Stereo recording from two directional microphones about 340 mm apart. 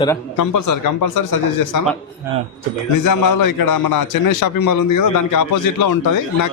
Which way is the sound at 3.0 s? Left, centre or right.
Left.